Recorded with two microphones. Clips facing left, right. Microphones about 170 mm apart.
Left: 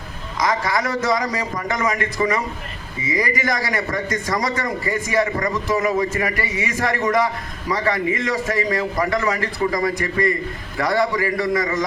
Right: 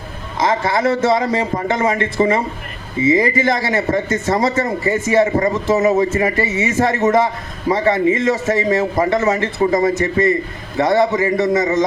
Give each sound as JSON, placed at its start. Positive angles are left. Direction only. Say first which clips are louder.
{"t": 0.3, "sound": "a man's voice", "louder": "right 4 dB", "side_deg": -25}